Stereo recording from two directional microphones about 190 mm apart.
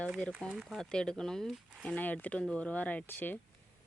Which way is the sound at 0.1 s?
Centre (ahead or behind).